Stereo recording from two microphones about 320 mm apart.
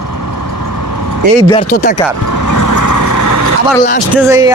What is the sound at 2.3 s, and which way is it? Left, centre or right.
Vehicle, left.